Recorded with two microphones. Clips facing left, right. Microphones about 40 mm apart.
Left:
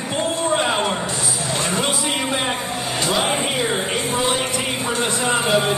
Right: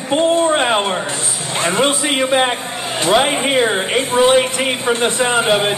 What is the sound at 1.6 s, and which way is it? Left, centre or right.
Speech, right.